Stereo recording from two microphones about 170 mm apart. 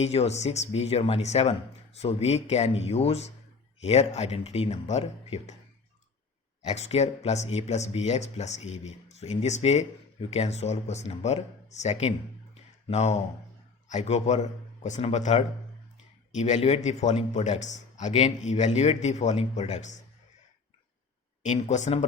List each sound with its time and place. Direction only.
0.0 s speech: 40° left (ahead or behind)
6.6 s a man's voice: 40° left (ahead or behind)
21.4 s a man's voice: 45° left (ahead or behind)